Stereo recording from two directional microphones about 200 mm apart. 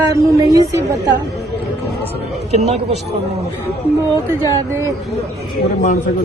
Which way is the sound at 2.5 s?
30° right (ahead or behind).